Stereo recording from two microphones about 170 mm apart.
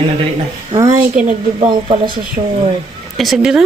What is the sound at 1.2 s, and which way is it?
Speech, 40° right (ahead or behind).